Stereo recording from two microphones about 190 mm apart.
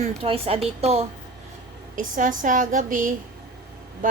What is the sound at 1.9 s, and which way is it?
A woman's voice, 45° right (ahead or behind).